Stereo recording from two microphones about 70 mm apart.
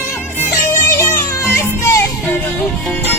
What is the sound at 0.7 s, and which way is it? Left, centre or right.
Music, left.